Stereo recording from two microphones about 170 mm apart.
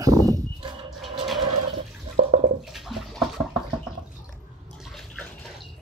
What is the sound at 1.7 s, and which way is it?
Toilet flush, 35° right (ahead or behind).